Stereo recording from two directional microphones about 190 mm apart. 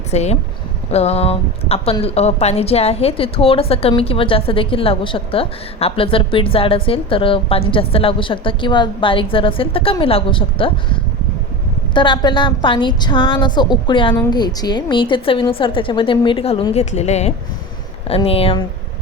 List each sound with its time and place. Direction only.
0.1 s speech: 35° left (ahead or behind)
11.9 s speech: 25° left (ahead or behind)